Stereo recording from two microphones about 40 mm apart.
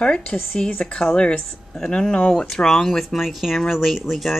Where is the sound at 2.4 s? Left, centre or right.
Centre.